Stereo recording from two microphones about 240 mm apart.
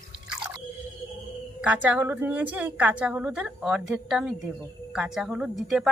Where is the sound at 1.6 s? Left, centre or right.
Centre.